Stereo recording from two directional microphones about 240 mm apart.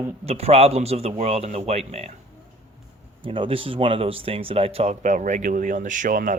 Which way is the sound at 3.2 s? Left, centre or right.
Right.